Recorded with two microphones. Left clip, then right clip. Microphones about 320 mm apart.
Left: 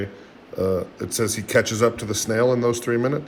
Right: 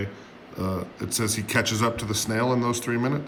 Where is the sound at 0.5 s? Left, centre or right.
Centre.